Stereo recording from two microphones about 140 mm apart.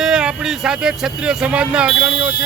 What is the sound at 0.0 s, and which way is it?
Speech, 5° right (ahead or behind).